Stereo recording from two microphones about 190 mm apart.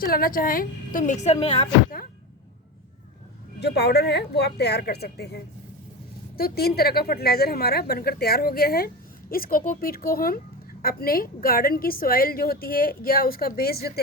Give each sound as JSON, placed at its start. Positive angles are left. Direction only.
{"t": 0.0, "sound": "a woman's voice", "side_deg": 50}
{"t": 3.6, "sound": "a woman's voice", "side_deg": 60}